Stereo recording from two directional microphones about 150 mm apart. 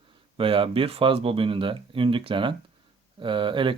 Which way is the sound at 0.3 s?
35° right (ahead or behind).